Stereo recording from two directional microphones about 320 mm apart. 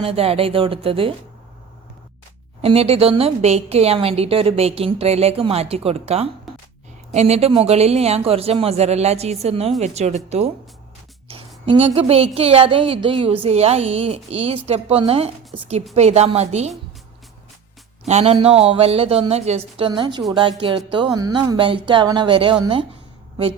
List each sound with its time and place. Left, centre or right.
0.0 s a woman's voice: centre
2.6 s a woman's voice: centre
18.0 s a man's voice: centre